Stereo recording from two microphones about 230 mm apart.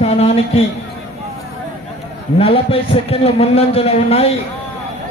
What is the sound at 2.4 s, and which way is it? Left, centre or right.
A man's voice, left.